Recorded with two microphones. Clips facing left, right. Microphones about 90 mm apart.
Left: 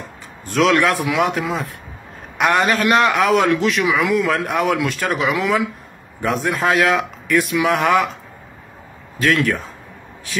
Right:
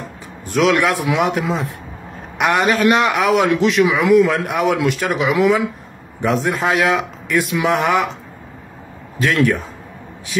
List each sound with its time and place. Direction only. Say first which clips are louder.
0.5 s a man's voice: even; 15° right (ahead or behind)
9.2 s a man's voice: right 1 dB; 20° right (ahead or behind)